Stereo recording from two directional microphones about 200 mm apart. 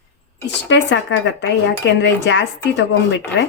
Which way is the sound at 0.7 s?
65° left (ahead or behind).